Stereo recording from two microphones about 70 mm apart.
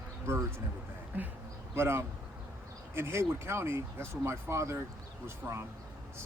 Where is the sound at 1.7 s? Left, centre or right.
Right.